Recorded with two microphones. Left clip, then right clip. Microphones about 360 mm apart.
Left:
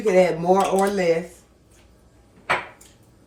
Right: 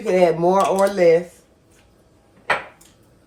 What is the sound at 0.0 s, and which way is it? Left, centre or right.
Speech, centre.